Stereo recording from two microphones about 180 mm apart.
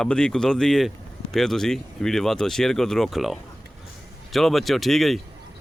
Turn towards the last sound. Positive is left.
turn(degrees=0)  # may be behind; listen again after turning